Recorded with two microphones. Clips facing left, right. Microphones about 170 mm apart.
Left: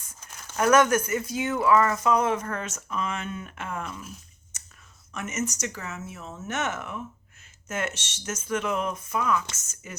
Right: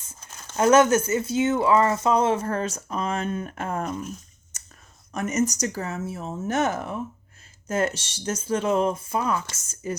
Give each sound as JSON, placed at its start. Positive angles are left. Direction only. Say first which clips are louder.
{"t": 0.0, "sound": "speech", "louder": "right 1 dB", "side_deg": -25}
{"t": 4.5, "sound": "clicking", "louder": "right 1 dB", "side_deg": -40}
{"t": 5.1, "sound": "speech", "louder": "right 7 dB", "side_deg": -35}